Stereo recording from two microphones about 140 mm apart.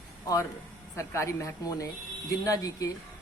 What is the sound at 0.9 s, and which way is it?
Speech, 20° left (ahead or behind).